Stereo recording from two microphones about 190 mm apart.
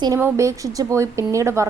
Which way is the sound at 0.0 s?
15° right (ahead or behind).